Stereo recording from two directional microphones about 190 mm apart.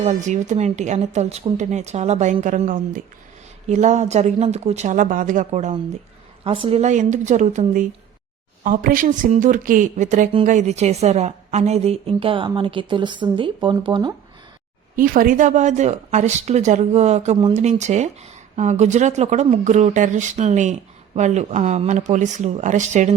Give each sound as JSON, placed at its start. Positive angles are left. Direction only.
{"t": 0.0, "sound": "speech", "side_deg": -35}
{"t": 14.9, "sound": "speech", "side_deg": -45}